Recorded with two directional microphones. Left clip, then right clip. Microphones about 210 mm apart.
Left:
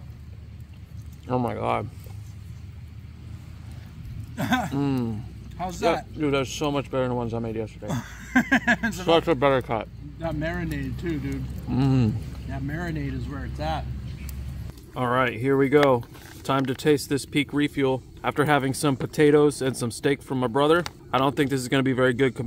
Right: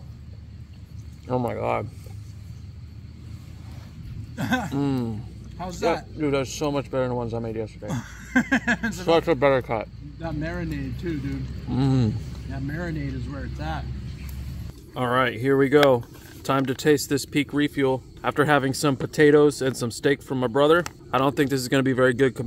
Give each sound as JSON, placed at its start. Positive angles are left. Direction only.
{"t": 1.2, "sound": "speech", "side_deg": 10}
{"t": 4.4, "sound": "speech", "side_deg": 40}
{"t": 4.7, "sound": "speech", "side_deg": 5}
{"t": 5.6, "sound": "speech", "side_deg": 40}
{"t": 6.1, "sound": "speech", "side_deg": 15}
{"t": 7.9, "sound": "speech", "side_deg": 40}
{"t": 9.0, "sound": "speech", "side_deg": 10}
{"t": 10.2, "sound": "speech", "side_deg": 40}
{"t": 11.7, "sound": "speech", "side_deg": 10}
{"t": 12.4, "sound": "speech", "side_deg": 40}
{"t": 15.0, "sound": "speech", "side_deg": 0}